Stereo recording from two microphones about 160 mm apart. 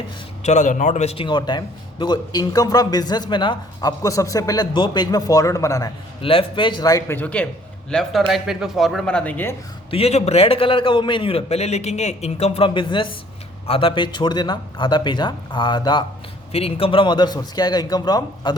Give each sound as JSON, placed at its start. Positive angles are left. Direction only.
{"t": 0.4, "sound": "a man's voice", "side_deg": 50}
{"t": 6.2, "sound": "a man's voice", "side_deg": 30}
{"t": 9.9, "sound": "a man's voice", "side_deg": 40}